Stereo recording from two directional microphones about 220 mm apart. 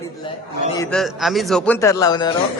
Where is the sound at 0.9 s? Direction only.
Centre (ahead or behind); by 2.3 s 15° left (ahead or behind).